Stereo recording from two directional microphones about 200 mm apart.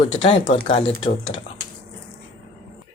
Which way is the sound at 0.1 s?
25° left (ahead or behind).